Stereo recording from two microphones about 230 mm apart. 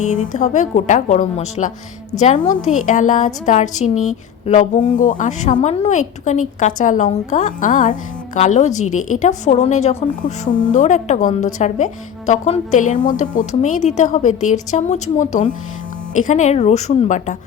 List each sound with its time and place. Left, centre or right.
0.1 s a woman's voice: left